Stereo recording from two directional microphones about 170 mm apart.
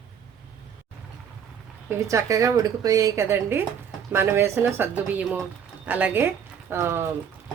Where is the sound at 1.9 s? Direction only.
20° right (ahead or behind).